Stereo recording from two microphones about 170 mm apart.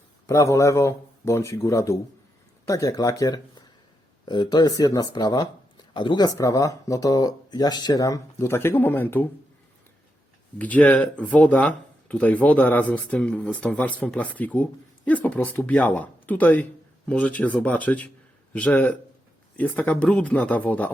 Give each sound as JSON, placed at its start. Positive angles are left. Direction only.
{"t": 0.3, "sound": "speech", "side_deg": 20}
{"t": 10.6, "sound": "speech", "side_deg": 10}